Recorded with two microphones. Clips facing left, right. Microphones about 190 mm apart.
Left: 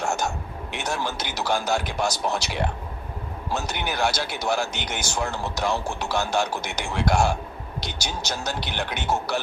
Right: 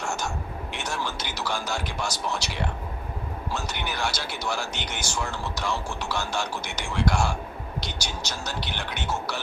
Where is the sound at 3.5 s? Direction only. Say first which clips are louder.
Left 5 dB; 45° left (ahead or behind).